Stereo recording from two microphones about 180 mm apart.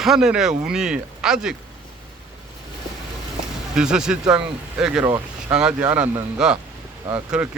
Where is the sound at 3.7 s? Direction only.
5° right (ahead or behind).